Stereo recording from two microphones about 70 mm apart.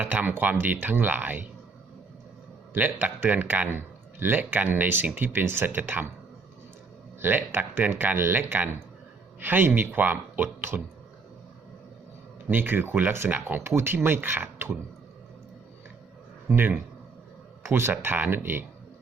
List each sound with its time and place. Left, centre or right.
0.0 s speech: right
2.7 s speech: right
7.2 s speech: right
12.5 s speech: right
16.5 s speech: right